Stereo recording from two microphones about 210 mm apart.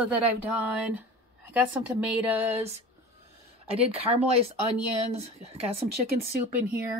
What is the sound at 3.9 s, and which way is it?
Speech, 30° right (ahead or behind).